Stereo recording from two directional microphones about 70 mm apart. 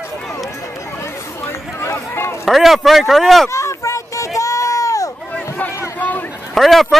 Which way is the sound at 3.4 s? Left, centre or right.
Left.